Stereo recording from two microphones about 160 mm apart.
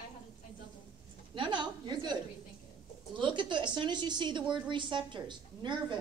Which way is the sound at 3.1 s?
30° right (ahead or behind).